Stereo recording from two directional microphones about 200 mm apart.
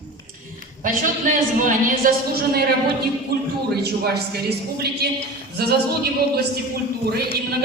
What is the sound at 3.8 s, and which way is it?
A man's voice, 55° right (ahead or behind).